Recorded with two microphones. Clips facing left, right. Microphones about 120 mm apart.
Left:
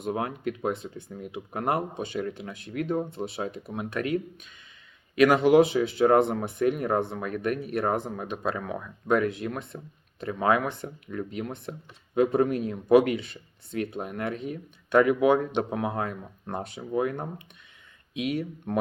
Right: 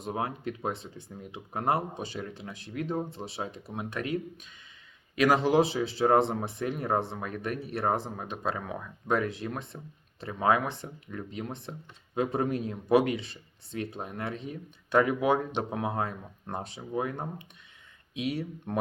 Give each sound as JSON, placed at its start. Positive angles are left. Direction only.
{"t": 0.0, "sound": "speech", "side_deg": -35}